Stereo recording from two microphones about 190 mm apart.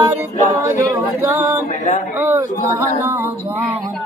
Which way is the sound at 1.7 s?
35° left (ahead or behind).